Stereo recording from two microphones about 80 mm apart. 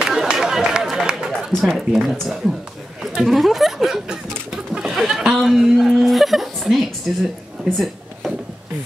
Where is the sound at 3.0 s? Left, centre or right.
Centre.